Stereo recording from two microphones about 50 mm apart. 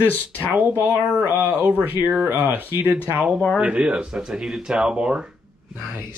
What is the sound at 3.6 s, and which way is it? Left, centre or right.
Speech, right.